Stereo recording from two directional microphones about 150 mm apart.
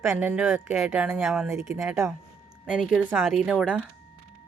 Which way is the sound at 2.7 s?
5° right (ahead or behind).